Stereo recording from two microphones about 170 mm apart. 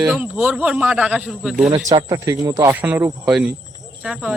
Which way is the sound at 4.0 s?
Centre (ahead or behind).